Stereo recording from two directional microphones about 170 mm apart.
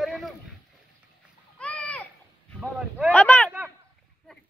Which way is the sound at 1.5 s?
5° left (ahead or behind).